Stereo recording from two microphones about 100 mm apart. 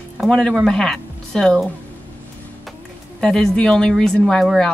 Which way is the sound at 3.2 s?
5° left (ahead or behind).